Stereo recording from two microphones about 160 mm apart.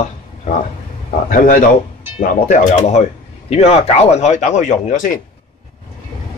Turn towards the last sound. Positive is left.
turn(degrees=55)  # may be behind; listen again after turning